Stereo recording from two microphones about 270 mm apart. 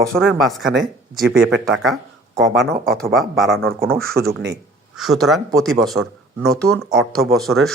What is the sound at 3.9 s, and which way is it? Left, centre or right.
Speech, right.